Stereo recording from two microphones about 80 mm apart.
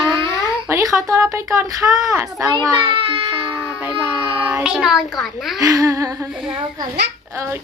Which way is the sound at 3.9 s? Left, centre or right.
Centre.